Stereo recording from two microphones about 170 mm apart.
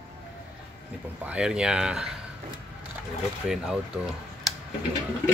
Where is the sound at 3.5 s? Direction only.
5° right (ahead or behind).